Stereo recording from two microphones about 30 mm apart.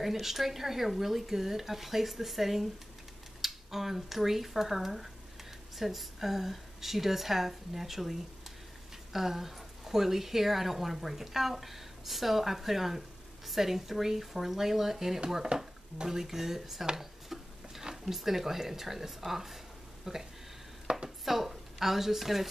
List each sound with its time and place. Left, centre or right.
0.0 s a woman's voice: centre
15.2 s speech: right
16.2 s a woman's voice: centre
17.0 s a sound: centre
18.0 s a woman's voice: centre
20.9 s speech: right
21.3 s speech: centre